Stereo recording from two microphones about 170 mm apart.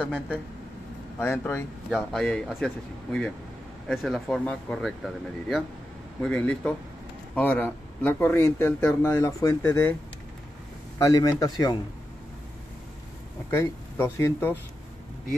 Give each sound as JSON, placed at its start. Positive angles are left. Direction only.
{"t": 0.0, "sound": "speech", "side_deg": 10}
{"t": 11.0, "sound": "a man's voice", "side_deg": 20}
{"t": 13.5, "sound": "speech", "side_deg": 15}